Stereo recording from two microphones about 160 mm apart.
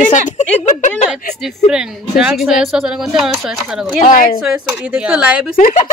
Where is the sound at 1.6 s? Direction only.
5° right (ahead or behind).